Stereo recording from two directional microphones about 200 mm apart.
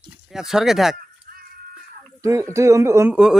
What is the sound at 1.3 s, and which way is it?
Music, 45° right (ahead or behind).